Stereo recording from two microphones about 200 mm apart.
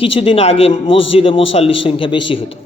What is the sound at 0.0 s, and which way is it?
Speech, 25° left (ahead or behind).